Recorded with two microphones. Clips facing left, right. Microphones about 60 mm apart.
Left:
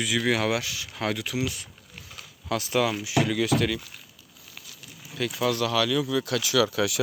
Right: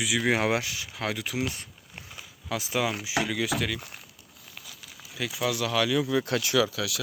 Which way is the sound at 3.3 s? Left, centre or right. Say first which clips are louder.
Left 4 dB; centre.